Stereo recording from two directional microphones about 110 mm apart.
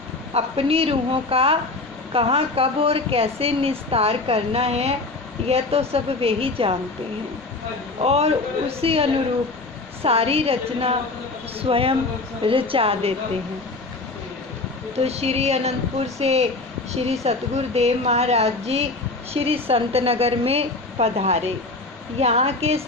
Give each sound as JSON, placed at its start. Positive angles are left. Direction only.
{"t": 0.3, "sound": "speech", "side_deg": -65}
{"t": 8.0, "sound": "speech", "side_deg": -65}
{"t": 14.9, "sound": "a woman's voice", "side_deg": -70}